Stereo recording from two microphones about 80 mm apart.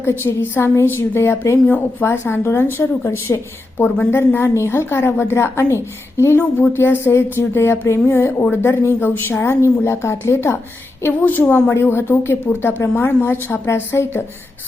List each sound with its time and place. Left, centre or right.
0.0 s a woman's voice: left
11.2 s speech: left
11.7 s speech: left
12.8 s a woman's voice: left